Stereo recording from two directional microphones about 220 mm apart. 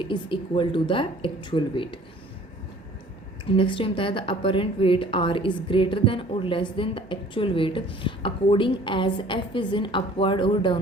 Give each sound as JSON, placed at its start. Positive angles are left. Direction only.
{"t": 0.0, "sound": "a woman's voice", "side_deg": 20}
{"t": 3.5, "sound": "a woman's voice", "side_deg": 25}